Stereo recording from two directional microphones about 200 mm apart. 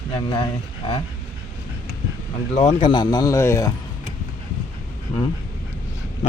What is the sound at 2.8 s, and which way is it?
Speech, 20° left (ahead or behind).